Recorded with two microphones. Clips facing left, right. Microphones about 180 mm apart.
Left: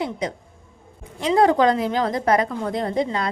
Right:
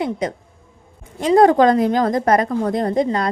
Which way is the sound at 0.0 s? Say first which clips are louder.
Right 4 dB; 50° right (ahead or behind).